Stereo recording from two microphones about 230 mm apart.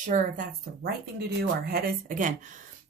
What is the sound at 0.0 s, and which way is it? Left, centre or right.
Speech, right.